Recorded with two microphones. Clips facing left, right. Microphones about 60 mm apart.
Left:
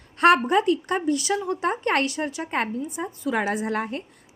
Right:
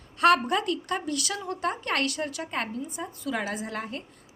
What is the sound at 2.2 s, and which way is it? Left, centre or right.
Speech, centre.